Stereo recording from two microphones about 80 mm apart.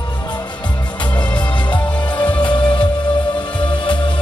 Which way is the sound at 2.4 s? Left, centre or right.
Left.